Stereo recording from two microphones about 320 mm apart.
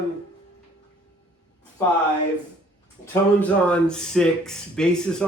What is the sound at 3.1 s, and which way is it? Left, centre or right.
Speech, centre.